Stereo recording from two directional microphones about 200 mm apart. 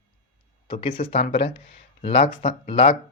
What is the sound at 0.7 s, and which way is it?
Speech, 25° left (ahead or behind).